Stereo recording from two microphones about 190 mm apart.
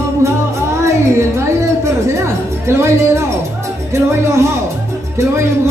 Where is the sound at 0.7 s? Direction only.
15° right (ahead or behind).